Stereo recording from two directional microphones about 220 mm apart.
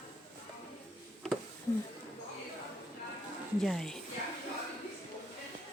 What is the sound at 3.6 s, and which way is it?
Speech, centre (ahead or behind).